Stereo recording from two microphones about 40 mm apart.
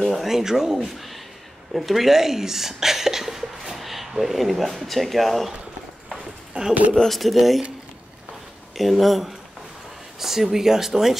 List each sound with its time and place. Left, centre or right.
0.0 s speech: centre
6.5 s speech: right
7.1 s speech: centre
8.7 s speech: centre